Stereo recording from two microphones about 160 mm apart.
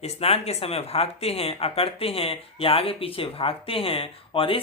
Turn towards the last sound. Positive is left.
turn(degrees=35)  # may be behind; listen again after turning